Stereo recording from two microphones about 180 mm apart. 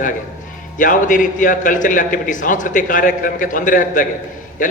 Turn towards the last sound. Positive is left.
turn(degrees=45)  # may be behind; listen again after turning